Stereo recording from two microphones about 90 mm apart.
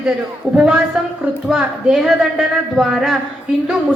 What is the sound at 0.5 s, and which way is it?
A woman's voice, 10° right (ahead or behind).